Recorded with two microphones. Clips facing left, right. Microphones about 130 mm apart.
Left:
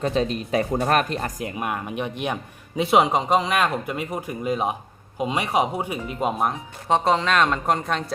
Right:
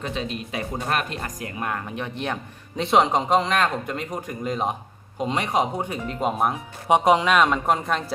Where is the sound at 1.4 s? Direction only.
15° left (ahead or behind).